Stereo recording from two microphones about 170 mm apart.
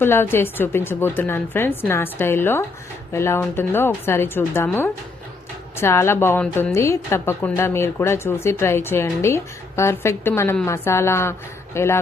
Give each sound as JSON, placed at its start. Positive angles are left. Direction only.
{"t": 0.0, "sound": "speech", "side_deg": 15}